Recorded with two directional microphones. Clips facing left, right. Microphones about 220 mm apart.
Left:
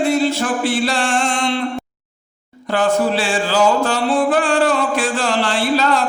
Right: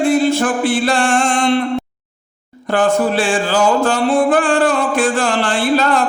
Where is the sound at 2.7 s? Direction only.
50° right (ahead or behind).